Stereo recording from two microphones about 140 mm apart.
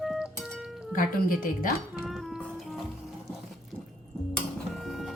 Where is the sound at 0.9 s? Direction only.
90° left.